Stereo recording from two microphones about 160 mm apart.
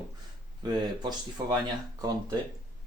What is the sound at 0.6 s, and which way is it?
Speech, 25° right (ahead or behind).